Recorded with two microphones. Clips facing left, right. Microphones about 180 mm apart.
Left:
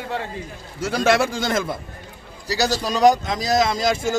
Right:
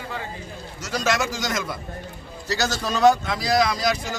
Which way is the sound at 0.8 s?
55° left (ahead or behind).